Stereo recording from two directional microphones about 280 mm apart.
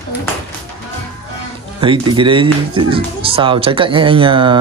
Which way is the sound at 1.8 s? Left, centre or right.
Centre.